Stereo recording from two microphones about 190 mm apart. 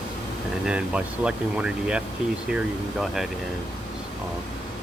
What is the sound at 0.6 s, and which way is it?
Speech, 5° right (ahead or behind).